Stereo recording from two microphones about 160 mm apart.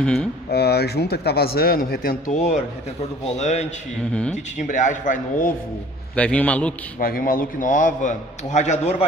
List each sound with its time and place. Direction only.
0.0 s speech: 5° left (ahead or behind)
0.5 s speech: 90° left; by 2.3 s 65° left (ahead or behind)
2.3 s a man's voice: 45° left (ahead or behind)
6.1 s a man's voice: 10° left (ahead or behind)
7.0 s a man's voice: 65° left (ahead or behind); by 8.9 s 45° left (ahead or behind)